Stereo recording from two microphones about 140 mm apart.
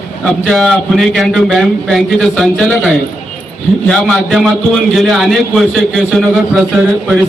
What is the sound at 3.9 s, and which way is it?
A man's voice, 5° left (ahead or behind).